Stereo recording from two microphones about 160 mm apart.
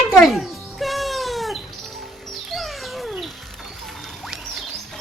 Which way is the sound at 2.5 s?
Centre (ahead or behind).